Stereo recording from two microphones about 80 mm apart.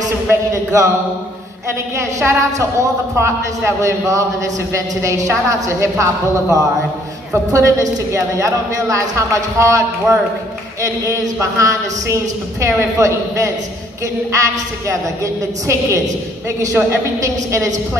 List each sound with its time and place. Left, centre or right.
0.3 s a sound: right
2.0 s a man's voice: right
7.5 s a man's voice: right